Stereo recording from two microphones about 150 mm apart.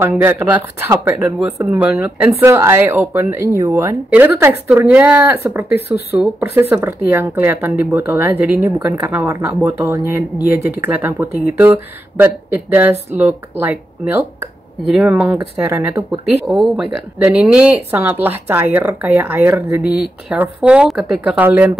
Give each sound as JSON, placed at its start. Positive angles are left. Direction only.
{"t": 0.0, "sound": "speech", "side_deg": -10}
{"t": 5.7, "sound": "a woman's voice", "side_deg": 90}
{"t": 6.2, "sound": "speech", "side_deg": -10}
{"t": 16.4, "sound": "speech", "side_deg": 0}